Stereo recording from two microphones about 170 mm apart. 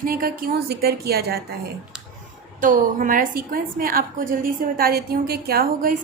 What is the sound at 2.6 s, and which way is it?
A woman's voice, 50° right (ahead or behind).